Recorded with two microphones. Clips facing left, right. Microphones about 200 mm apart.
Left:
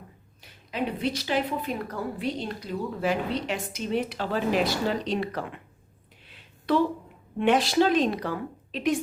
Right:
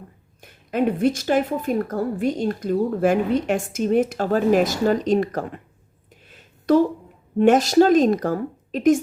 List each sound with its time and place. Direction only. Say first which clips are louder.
0.4 s a woman's voice: right 9 dB; 50° right (ahead or behind)
6.2 s a sound: right 8 dB; 45° right (ahead or behind)
7.3 s a woman's voice: right 7 dB; 45° right (ahead or behind)